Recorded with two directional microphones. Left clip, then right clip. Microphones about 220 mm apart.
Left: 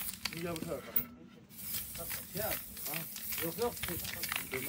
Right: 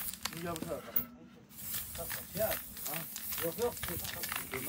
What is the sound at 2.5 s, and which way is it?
Run, 15° right (ahead or behind).